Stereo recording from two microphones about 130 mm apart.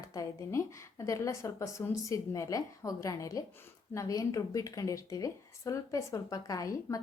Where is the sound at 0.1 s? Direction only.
25° left (ahead or behind).